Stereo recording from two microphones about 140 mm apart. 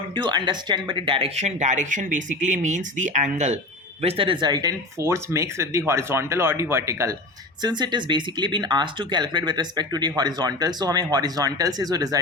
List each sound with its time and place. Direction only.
0.1 s speech: 30° right (ahead or behind)
1.4 s speech: 55° right (ahead or behind)
4.0 s speech: 40° right (ahead or behind); by 7.2 s 20° right (ahead or behind)
7.6 s speech: 30° right (ahead or behind)